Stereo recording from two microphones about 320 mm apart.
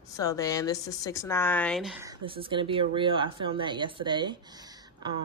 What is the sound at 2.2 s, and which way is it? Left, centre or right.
A woman's voice, centre.